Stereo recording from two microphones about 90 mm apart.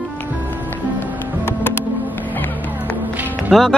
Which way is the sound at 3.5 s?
Centre (ahead or behind).